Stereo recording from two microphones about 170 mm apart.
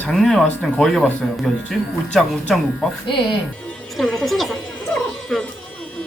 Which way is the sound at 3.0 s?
30° left (ahead or behind).